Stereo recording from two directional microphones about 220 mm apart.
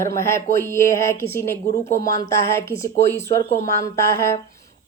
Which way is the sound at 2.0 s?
40° right (ahead or behind).